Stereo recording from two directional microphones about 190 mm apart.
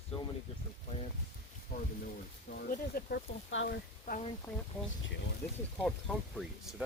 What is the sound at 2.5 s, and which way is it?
Speech, 50° left (ahead or behind).